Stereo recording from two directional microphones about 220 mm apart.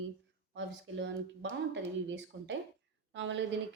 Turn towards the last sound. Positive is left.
turn(degrees=-55)  # may be behind; listen again after turning